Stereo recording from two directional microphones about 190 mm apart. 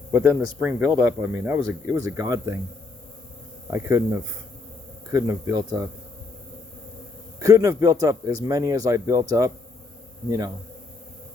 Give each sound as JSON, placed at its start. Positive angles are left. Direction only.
{"t": 0.1, "sound": "speech", "side_deg": -15}
{"t": 3.7, "sound": "speech", "side_deg": -15}
{"t": 7.3, "sound": "speech", "side_deg": -15}